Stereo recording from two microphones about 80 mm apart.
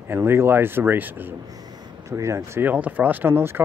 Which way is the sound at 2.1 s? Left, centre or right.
Right.